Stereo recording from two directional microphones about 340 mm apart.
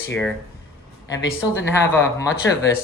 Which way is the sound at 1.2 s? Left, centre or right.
Left.